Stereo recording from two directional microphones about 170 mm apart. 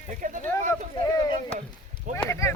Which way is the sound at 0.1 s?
50° right (ahead or behind).